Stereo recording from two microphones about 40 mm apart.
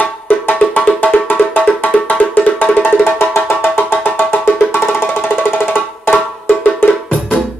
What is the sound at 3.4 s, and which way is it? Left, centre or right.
Music, left.